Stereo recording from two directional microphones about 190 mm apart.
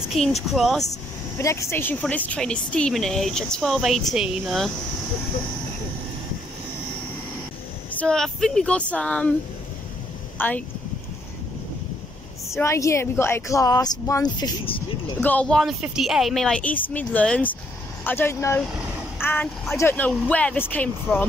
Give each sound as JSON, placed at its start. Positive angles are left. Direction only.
{"t": 0.1, "sound": "a woman's voice", "side_deg": 0}
{"t": 1.4, "sound": "a woman's voice", "side_deg": 15}
{"t": 8.0, "sound": "a woman's voice", "side_deg": 5}
{"t": 10.3, "sound": "speech", "side_deg": 10}
{"t": 12.4, "sound": "a woman's voice", "side_deg": 15}
{"t": 15.1, "sound": "a woman's voice", "side_deg": 5}
{"t": 19.2, "sound": "a sound", "side_deg": 10}
{"t": 19.7, "sound": "a woman's voice", "side_deg": 10}